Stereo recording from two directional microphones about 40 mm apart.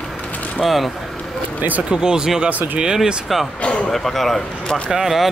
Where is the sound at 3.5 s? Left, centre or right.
Left.